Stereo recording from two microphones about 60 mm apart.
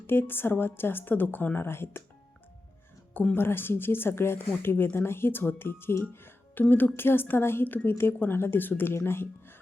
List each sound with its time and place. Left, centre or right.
0.1 s speech: left
3.3 s speech: left